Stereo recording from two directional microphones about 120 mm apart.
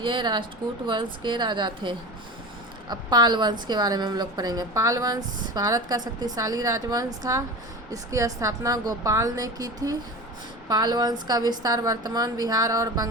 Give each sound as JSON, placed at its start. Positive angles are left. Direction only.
{"t": 0.0, "sound": "a woman's voice", "side_deg": -40}